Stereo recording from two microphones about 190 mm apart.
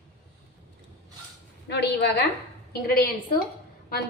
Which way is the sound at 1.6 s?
65° left (ahead or behind).